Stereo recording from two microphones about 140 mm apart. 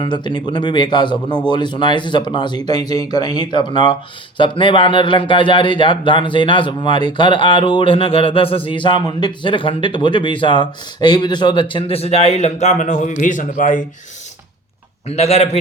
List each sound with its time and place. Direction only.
0.0 s speech: 35° left (ahead or behind); by 13.8 s 65° left (ahead or behind)
15.0 s a man's voice: 50° left (ahead or behind)